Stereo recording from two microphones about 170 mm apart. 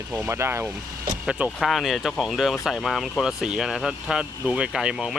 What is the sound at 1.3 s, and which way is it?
Speech, 5° right (ahead or behind).